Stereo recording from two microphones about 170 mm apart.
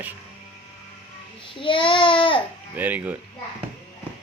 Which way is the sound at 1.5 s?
30° left (ahead or behind).